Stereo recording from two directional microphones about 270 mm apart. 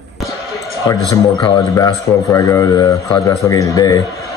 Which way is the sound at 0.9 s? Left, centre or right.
Centre.